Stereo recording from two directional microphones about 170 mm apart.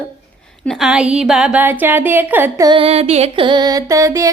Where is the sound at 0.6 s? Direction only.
Centre (ahead or behind).